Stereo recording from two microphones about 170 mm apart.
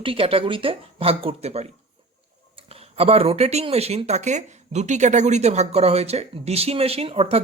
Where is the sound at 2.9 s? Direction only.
35° right (ahead or behind).